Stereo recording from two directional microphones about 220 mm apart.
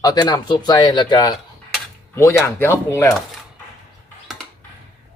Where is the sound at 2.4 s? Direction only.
10° left (ahead or behind).